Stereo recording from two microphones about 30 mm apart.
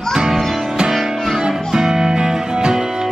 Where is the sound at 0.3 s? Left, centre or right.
Centre.